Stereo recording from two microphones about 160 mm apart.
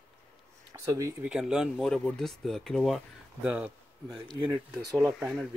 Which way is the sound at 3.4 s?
5° right (ahead or behind).